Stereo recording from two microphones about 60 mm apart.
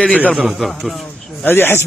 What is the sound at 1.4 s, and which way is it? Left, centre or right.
Speech, left.